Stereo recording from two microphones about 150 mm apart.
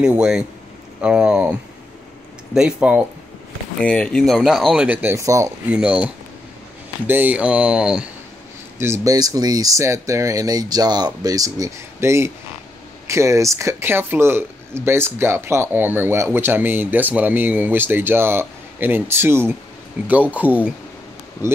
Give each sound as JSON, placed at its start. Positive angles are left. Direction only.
{"t": 0.0, "sound": "speech", "side_deg": -5}
{"t": 3.8, "sound": "speech", "side_deg": 5}
{"t": 5.7, "sound": "speech", "side_deg": -5}
{"t": 7.1, "sound": "speech", "side_deg": -10}
{"t": 8.7, "sound": "speech", "side_deg": -15}